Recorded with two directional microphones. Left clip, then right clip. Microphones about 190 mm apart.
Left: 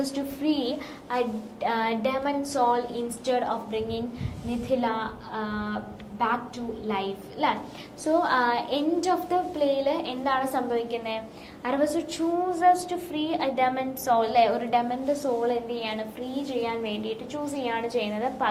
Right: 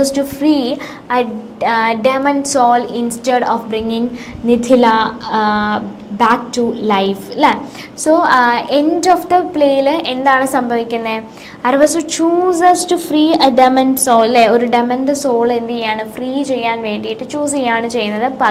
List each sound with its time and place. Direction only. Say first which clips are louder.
0.0 s a woman's voice: right 15 dB; 45° right (ahead or behind)